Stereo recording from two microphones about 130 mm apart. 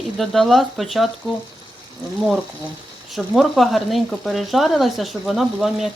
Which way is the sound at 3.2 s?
Centre (ahead or behind).